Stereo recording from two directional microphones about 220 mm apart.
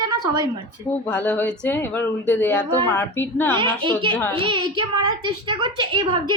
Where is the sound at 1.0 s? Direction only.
5° left (ahead or behind).